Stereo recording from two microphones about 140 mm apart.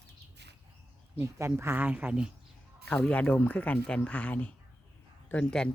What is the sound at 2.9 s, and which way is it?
Speech, 10° left (ahead or behind).